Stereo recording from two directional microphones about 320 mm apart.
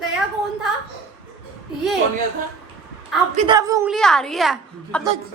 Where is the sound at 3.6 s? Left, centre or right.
Centre.